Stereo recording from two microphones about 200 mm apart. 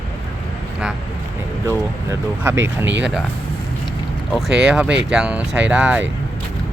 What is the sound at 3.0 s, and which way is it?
Speech, 5° right (ahead or behind).